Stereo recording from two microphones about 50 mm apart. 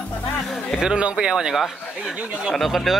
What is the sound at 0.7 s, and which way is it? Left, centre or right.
Speech, centre.